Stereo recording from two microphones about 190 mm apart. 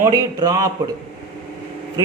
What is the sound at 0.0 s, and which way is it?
Speech, 20° right (ahead or behind).